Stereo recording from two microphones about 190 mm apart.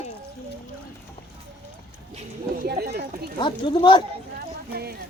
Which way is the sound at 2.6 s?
55° right (ahead or behind).